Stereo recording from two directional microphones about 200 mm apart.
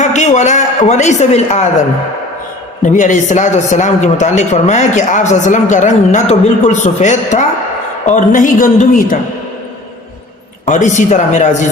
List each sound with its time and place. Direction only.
0.0 s a man's voice: 35° left (ahead or behind)
2.8 s a man's voice: 40° left (ahead or behind)
10.7 s a man's voice: 40° left (ahead or behind)